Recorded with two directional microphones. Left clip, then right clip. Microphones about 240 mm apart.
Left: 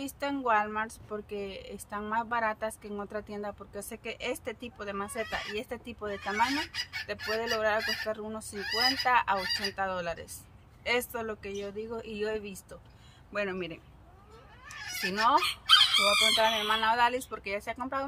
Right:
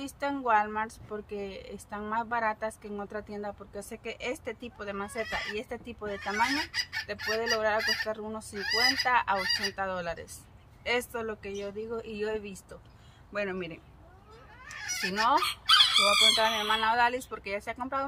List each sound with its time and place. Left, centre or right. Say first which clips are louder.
0.0 s speech: even; centre
6.7 s chicken: right 3 dB; right
7.2 s speech: right 1 dB; centre
15.0 s speech: left 1 dB; centre
15.4 s chicken: even; right
16.1 s speech: right 1 dB; centre